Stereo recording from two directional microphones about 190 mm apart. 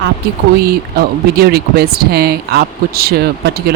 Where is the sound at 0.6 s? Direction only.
55° right (ahead or behind).